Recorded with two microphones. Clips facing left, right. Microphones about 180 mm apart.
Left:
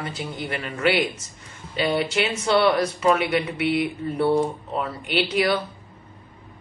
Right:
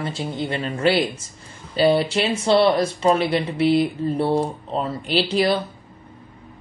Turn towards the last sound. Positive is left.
turn(degrees=-30)  # may be behind; listen again after turning